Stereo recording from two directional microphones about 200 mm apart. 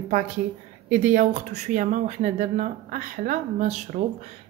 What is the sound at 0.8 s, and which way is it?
A woman's voice, 40° right (ahead or behind).